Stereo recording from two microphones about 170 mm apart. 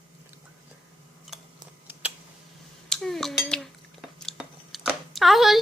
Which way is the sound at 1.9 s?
10° right (ahead or behind).